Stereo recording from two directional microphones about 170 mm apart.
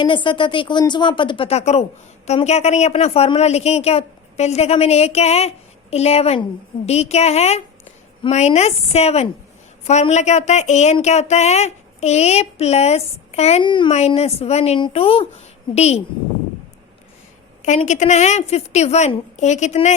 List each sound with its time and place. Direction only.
0.0 s speech: 30° left (ahead or behind)
13.7 s speech: 30° left (ahead or behind)
13.9 s speech: 40° left (ahead or behind)
17.6 s a woman's voice: 45° left (ahead or behind)